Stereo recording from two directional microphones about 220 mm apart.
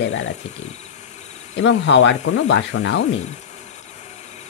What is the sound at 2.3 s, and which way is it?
Speech, 75° left (ahead or behind).